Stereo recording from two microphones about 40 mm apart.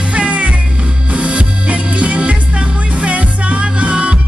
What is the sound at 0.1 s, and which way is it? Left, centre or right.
Music, right.